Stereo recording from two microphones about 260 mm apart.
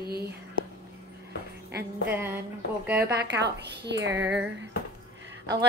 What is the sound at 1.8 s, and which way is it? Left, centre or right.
Music, centre.